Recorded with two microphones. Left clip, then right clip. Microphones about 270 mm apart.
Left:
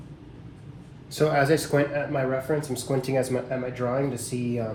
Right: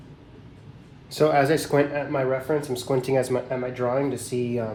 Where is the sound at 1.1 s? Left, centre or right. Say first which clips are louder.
Right 2 dB; right.